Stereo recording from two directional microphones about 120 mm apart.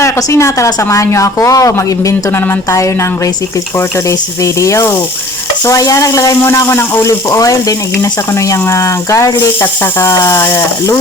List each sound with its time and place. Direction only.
0.0 s speech: 25° left (ahead or behind)
4.4 s speech: 25° left (ahead or behind)